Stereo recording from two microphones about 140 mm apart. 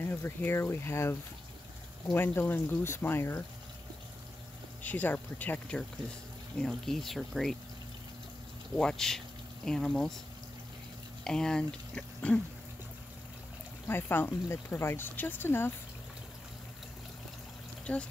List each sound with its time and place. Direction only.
0.1 s speech: 15° left (ahead or behind)
4.8 s speech: 10° left (ahead or behind)
8.7 s speech: 5° left (ahead or behind)
11.2 s speech: 5° left (ahead or behind)
13.8 s speech: 15° left (ahead or behind)
17.9 s speech: 10° left (ahead or behind)